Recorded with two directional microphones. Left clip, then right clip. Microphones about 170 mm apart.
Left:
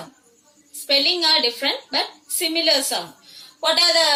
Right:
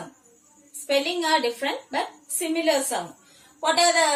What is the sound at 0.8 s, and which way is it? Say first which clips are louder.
A woman's voice: left 5 dB; 25° right (ahead or behind).